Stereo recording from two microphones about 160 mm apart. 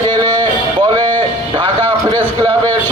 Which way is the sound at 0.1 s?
30° right (ahead or behind).